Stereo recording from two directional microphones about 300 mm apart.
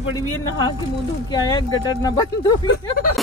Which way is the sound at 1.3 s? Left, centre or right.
Centre.